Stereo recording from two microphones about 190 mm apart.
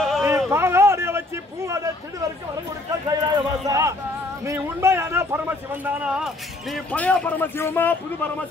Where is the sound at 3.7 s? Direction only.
15° right (ahead or behind).